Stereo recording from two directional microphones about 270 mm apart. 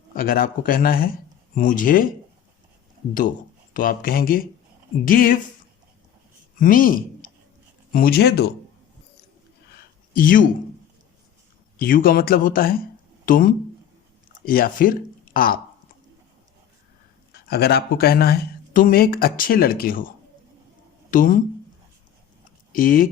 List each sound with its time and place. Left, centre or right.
0.1 s speech: left
3.8 s speech: left
6.6 s speech: left
10.2 s speech: left
11.8 s speech: left
17.3 s speech: left
21.1 s speech: left
22.7 s speech: left